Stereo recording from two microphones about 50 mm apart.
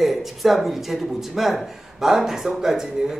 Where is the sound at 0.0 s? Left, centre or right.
Centre.